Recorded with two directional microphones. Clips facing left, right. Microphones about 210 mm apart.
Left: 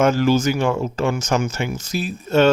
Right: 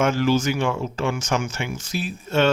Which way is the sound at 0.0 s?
40° left (ahead or behind).